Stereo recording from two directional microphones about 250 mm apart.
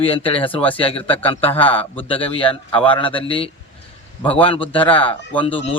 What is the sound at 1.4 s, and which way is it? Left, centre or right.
Speech, centre.